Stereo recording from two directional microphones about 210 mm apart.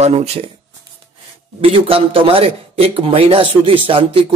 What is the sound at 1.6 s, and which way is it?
A man's voice, 25° right (ahead or behind).